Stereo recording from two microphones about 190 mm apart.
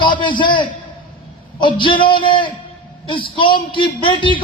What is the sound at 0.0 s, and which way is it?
A man's voice, 25° left (ahead or behind).